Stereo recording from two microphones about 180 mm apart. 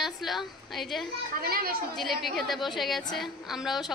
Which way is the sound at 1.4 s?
55° right (ahead or behind).